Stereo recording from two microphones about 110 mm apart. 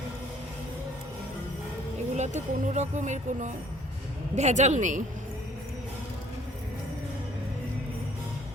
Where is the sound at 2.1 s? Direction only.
90° right.